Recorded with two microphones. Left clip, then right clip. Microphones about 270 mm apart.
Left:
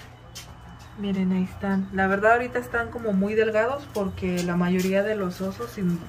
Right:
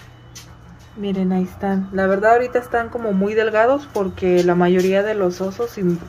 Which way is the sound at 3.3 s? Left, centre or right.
Right.